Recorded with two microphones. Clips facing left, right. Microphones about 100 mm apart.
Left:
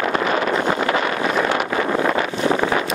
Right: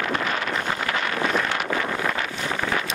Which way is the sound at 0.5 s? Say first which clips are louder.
Left 7 dB; 40° left (ahead or behind).